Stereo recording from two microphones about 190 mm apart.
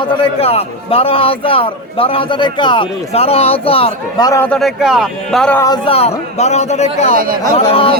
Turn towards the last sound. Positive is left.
turn(degrees=30)  # may be behind; listen again after turning